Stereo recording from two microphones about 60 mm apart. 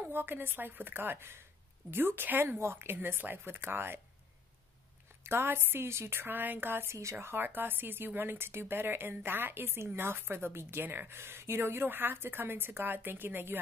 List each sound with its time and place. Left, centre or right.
0.1 s speech: right
5.2 s speech: right